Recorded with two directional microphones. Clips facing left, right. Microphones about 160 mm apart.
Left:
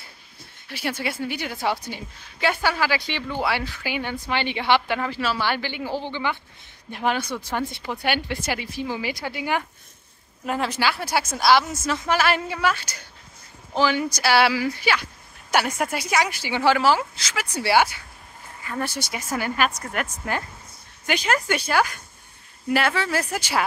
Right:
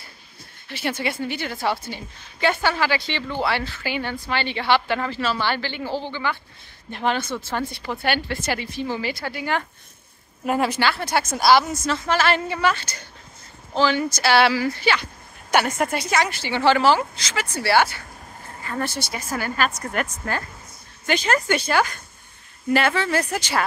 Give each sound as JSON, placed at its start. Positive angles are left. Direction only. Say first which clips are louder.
{"t": 0.7, "sound": "speech", "louder": "right 2 dB", "side_deg": 10}
{"t": 10.4, "sound": "speech", "louder": "right 4 dB", "side_deg": -5}
{"t": 10.8, "sound": "speech", "louder": "right 1 dB", "side_deg": 10}
{"t": 20.0, "sound": "speech", "louder": "right 1 dB", "side_deg": 5}